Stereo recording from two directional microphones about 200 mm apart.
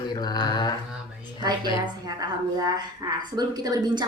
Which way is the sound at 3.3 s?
20° right (ahead or behind).